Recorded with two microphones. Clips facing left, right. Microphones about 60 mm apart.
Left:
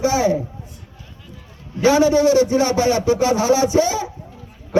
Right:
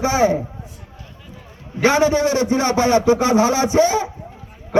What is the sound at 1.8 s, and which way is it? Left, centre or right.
A man's voice, right.